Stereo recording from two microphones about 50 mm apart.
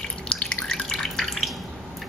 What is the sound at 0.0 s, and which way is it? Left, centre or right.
Drip, centre.